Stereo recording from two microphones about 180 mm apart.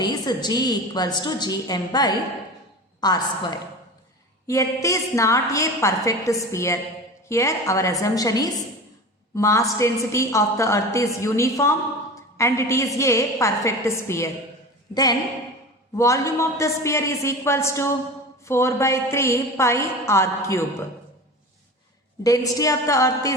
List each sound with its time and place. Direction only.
0.0 s a woman's voice: 20° left (ahead or behind)
16.0 s a woman's voice: 15° left (ahead or behind)
22.2 s a woman's voice: 20° left (ahead or behind)